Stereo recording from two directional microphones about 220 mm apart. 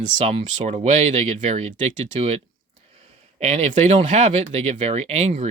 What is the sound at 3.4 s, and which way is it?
Speech, 30° right (ahead or behind).